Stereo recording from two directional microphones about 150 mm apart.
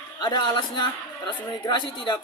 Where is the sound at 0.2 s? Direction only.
30° left (ahead or behind).